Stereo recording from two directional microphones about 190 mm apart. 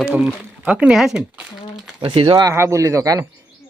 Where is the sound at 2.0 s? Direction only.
30° right (ahead or behind).